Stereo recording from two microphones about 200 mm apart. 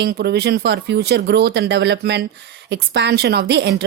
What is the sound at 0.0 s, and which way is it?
A woman's voice, 55° right (ahead or behind).